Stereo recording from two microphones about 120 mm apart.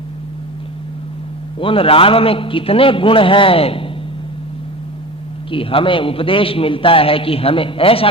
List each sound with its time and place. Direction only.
1.5 s a man's voice: 50° left (ahead or behind)
5.5 s a man's voice: 50° left (ahead or behind)